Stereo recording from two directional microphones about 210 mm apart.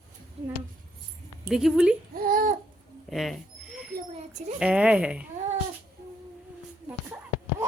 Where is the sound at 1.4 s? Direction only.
Centre (ahead or behind).